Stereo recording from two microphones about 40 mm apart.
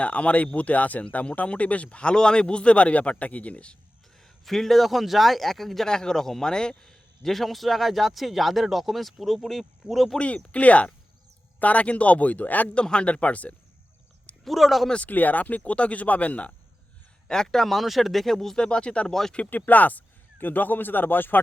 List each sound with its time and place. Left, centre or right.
0.0 s a man's voice: left
4.2 s a man's voice: centre
5.9 s a man's voice: centre
10.2 s a man's voice: left
12.7 s a man's voice: left
14.4 s a man's voice: centre
14.9 s a man's voice: left
17.2 s a man's voice: centre
18.5 s speech: left
19.0 s speech: centre
19.5 s speech: left